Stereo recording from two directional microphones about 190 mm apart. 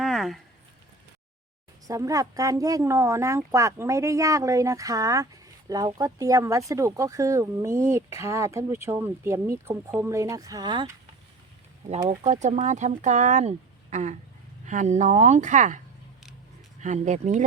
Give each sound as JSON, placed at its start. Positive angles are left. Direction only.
{"t": 0.0, "sound": "a sound", "side_deg": 0}
{"t": 1.9, "sound": "speech", "side_deg": -15}
{"t": 12.0, "sound": "speech", "side_deg": -40}
{"t": 16.8, "sound": "speech", "side_deg": -40}